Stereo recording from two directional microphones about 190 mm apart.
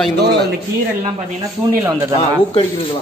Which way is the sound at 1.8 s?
15° right (ahead or behind).